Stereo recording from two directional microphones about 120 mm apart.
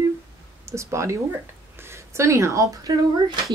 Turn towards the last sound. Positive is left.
turn(degrees=-35)  # may be behind; listen again after turning